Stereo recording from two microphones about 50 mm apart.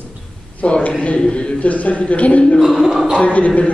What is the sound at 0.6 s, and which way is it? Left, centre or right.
A man's voice, left.